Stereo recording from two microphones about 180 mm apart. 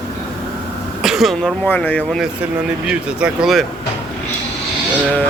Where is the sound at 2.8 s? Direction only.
Centre (ahead or behind).